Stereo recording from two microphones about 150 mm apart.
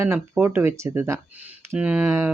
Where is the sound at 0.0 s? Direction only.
15° right (ahead or behind).